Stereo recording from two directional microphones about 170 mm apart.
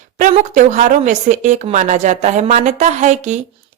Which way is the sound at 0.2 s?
50° right (ahead or behind).